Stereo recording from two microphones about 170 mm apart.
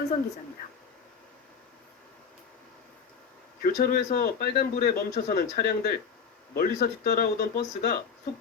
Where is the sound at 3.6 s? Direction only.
60° left (ahead or behind).